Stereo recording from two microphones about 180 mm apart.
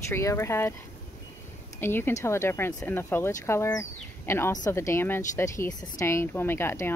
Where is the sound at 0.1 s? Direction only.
15° left (ahead or behind).